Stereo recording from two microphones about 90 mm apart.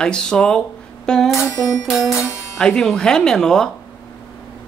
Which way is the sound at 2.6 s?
5° left (ahead or behind).